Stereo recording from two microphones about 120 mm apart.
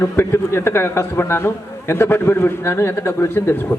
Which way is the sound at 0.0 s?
20° left (ahead or behind).